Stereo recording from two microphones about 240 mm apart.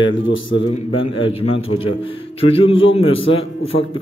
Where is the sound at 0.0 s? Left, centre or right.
Left.